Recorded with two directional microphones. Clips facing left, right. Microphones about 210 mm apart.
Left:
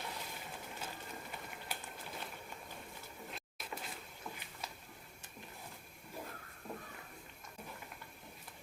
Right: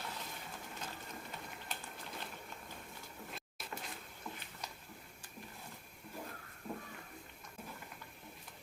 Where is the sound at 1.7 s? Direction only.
10° left (ahead or behind).